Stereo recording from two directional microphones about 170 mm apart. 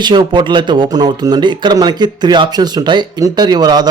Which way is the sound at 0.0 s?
25° right (ahead or behind).